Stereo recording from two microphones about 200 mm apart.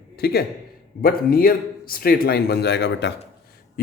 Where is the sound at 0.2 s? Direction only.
50° left (ahead or behind).